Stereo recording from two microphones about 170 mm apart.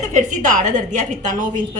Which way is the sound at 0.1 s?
45° right (ahead or behind).